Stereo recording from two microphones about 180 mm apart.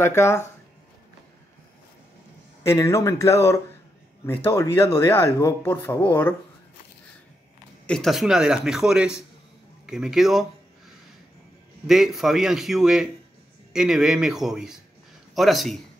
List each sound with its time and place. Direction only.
0.0 s speech: 15° left (ahead or behind)
2.6 s speech: 15° left (ahead or behind)
7.8 s speech: 5° left (ahead or behind)
11.9 s speech: centre (ahead or behind)